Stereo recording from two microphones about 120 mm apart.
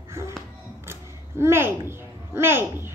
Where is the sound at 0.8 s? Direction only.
20° right (ahead or behind).